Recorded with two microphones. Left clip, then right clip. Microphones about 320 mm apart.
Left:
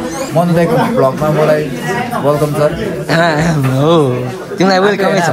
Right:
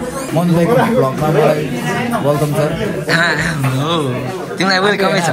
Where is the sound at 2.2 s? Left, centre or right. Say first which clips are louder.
Left 5 dB; centre.